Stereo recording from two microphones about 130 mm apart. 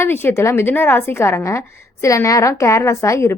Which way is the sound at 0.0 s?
15° left (ahead or behind).